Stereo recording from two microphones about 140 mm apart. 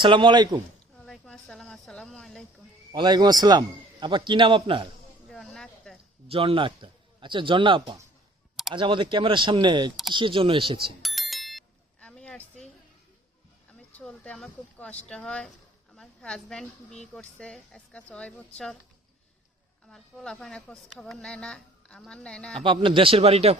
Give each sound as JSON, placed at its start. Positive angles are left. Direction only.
{"t": 0.0, "sound": "a man's voice", "side_deg": -35}
{"t": 0.9, "sound": "a woman's voice", "side_deg": 5}
{"t": 2.9, "sound": "a man's voice", "side_deg": -30}
{"t": 5.3, "sound": "a sound", "side_deg": 0}
{"t": 6.2, "sound": "a man's voice", "side_deg": -40}
{"t": 11.0, "sound": "a sound", "side_deg": 0}
{"t": 13.9, "sound": "speech", "side_deg": 5}
{"t": 19.9, "sound": "speech", "side_deg": 5}
{"t": 22.6, "sound": "a man's voice", "side_deg": -35}